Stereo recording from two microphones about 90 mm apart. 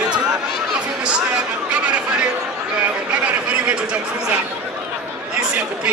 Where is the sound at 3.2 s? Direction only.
15° right (ahead or behind).